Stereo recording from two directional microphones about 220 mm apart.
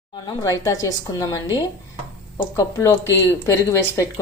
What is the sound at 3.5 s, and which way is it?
Speech, 15° left (ahead or behind).